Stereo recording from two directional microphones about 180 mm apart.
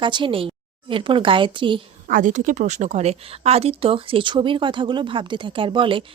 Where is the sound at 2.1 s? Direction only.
45° right (ahead or behind).